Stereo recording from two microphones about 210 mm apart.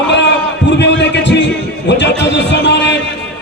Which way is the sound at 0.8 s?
55° left (ahead or behind).